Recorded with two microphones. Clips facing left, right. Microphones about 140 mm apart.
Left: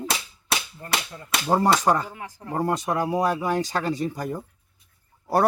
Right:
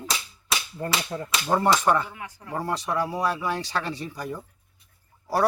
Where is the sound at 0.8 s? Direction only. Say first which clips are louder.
Right 4 dB; 50° right (ahead or behind).